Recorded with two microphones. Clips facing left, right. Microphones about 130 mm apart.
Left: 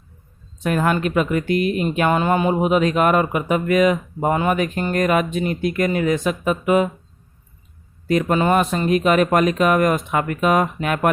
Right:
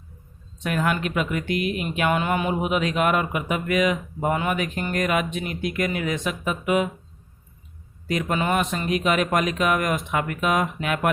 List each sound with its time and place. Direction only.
0.6 s speech: 40° left (ahead or behind)
8.0 s speech: 40° left (ahead or behind)